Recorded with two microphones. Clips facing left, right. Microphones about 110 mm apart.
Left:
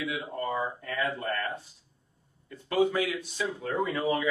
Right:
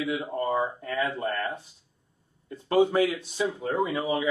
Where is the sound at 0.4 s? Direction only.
20° right (ahead or behind).